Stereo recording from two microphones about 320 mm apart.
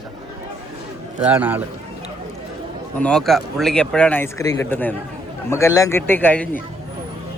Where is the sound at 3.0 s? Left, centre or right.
Centre.